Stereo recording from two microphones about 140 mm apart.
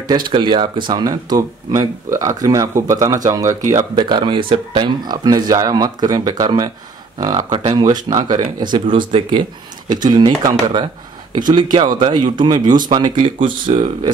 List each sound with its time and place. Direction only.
0.3 s speech: 35° right (ahead or behind)
3.9 s speech: 35° right (ahead or behind)